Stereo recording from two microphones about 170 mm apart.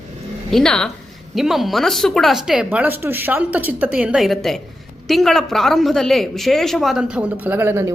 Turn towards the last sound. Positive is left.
turn(degrees=-15)  # may be behind; listen again after turning